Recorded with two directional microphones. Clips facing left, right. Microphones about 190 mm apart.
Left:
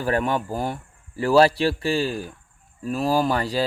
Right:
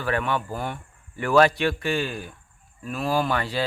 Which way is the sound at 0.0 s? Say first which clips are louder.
Left 3 dB; 40° left (ahead or behind).